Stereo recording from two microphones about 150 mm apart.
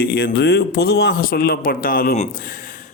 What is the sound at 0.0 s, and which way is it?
Speech, 90° left.